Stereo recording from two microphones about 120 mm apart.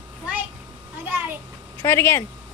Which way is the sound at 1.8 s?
20° left (ahead or behind).